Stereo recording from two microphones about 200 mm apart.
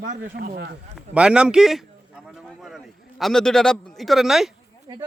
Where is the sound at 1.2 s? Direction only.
5° right (ahead or behind).